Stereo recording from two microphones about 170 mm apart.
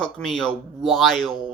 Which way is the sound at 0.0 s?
5° left (ahead or behind).